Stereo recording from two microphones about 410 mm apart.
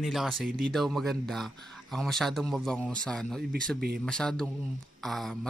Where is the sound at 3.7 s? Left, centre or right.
Right.